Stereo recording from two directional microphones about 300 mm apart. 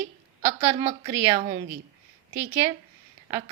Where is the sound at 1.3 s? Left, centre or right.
Right.